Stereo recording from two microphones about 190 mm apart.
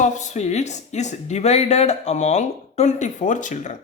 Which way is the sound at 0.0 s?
40° left (ahead or behind).